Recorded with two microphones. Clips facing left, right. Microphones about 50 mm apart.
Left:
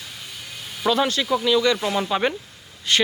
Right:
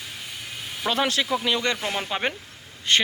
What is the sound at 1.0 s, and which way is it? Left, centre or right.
Speech, right.